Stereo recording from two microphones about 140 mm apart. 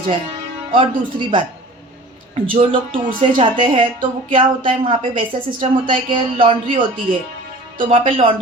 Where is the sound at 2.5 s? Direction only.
40° right (ahead or behind).